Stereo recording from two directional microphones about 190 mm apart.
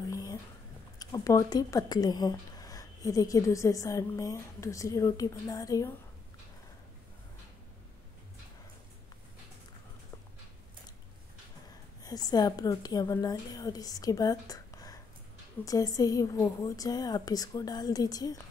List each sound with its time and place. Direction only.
0.1 s a sound: 20° left (ahead or behind)
0.9 s speech: 20° left (ahead or behind)
12.0 s a woman's voice: 20° left (ahead or behind)